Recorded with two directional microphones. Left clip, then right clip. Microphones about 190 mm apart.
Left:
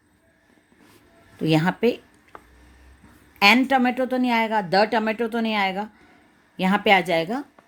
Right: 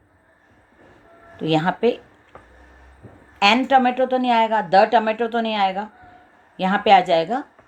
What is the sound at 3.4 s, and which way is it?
A woman's voice, 40° left (ahead or behind).